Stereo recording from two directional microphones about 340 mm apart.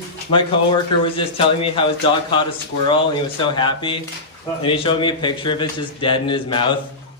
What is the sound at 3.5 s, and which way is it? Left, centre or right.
A man's voice, centre.